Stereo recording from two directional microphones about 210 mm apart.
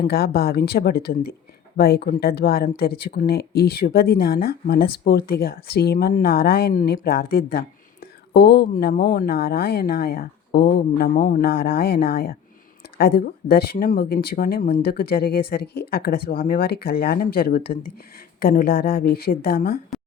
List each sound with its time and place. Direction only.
0.0 s speech: 45° left (ahead or behind)